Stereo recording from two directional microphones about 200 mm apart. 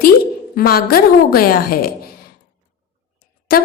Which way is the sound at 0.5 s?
50° left (ahead or behind).